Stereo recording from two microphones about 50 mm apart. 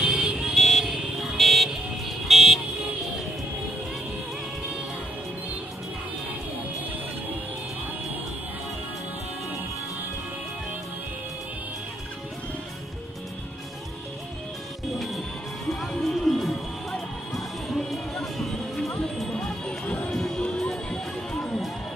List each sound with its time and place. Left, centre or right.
0.0 s vehicle: centre
0.6 s vehicle: centre
0.8 s vehicle: centre
1.4 s car alarm: centre
15.0 s music: centre
20.3 s music: centre